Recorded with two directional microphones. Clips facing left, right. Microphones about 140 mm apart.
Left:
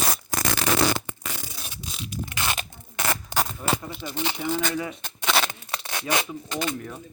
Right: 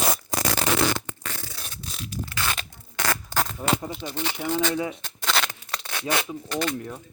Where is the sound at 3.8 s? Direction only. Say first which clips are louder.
Right 3 dB; 30° right (ahead or behind).